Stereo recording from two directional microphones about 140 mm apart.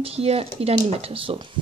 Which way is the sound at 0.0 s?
45° right (ahead or behind).